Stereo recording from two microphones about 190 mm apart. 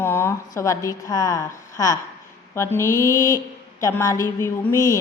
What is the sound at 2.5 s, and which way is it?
A woman's voice, 15° left (ahead or behind).